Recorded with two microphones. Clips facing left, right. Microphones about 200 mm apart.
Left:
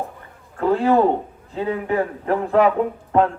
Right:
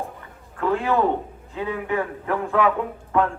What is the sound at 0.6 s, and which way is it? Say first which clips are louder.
A man's voice: left 5 dB; 35° left (ahead or behind).